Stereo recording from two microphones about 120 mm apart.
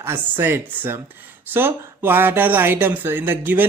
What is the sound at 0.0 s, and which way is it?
Speech, 15° right (ahead or behind).